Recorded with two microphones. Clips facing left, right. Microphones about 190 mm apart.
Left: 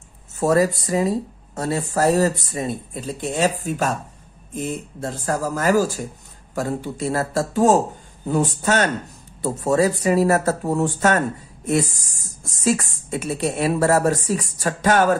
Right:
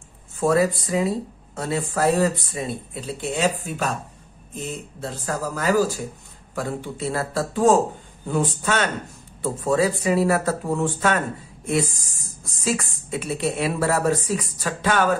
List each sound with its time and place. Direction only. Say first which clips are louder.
0.4 s speech: left 2 dB; 40° left (ahead or behind)
5.2 s speech: left 3 dB; 45° left (ahead or behind)